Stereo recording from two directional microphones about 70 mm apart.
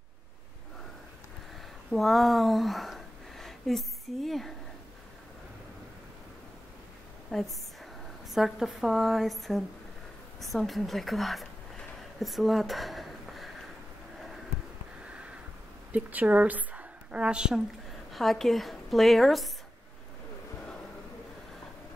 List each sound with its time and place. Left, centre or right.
1.9 s speech: centre
7.2 s a woman's voice: centre
12.2 s a sound: centre
15.9 s a woman's voice: right
18.1 s speech: centre